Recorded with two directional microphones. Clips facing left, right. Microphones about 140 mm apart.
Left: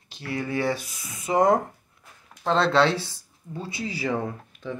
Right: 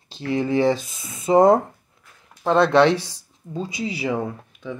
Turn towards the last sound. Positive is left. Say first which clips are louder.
# right 2 dB
turn(degrees=-10)  # may be behind; listen again after turning